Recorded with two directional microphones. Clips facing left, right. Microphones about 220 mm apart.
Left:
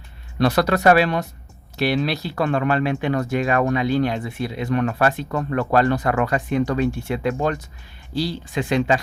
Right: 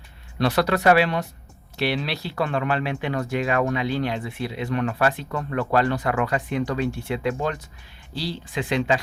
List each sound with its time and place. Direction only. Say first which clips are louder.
0.3 s speech: left 3 dB; 40° left (ahead or behind)